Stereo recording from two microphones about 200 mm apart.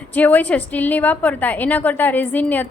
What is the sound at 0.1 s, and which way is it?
A woman's voice, 10° left (ahead or behind).